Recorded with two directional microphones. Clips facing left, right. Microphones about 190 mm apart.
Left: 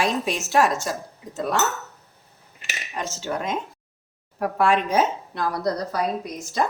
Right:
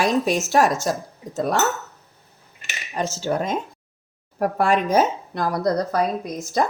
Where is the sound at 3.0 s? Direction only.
35° right (ahead or behind).